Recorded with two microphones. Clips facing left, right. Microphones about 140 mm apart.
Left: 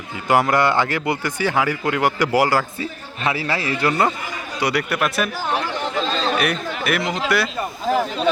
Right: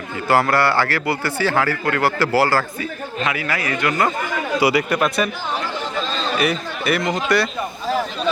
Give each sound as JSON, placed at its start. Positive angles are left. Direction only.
{"t": 0.3, "sound": "speech", "side_deg": 15}
{"t": 3.2, "sound": "a man's voice", "side_deg": 30}
{"t": 4.6, "sound": "speech", "side_deg": 0}
{"t": 6.3, "sound": "speech", "side_deg": 0}